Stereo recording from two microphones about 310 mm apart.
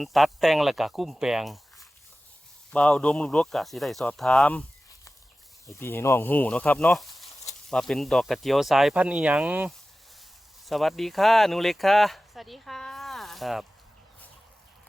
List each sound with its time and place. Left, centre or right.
0.0 s speech: centre
5.6 s speech: centre